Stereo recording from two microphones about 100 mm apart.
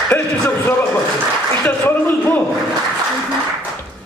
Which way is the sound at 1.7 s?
20° left (ahead or behind).